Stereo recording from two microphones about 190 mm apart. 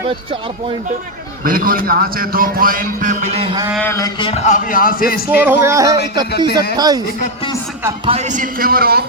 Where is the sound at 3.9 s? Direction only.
20° left (ahead or behind); by 5.4 s 50° left (ahead or behind).